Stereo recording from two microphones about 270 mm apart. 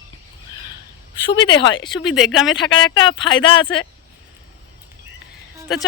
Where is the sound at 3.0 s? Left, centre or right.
Centre.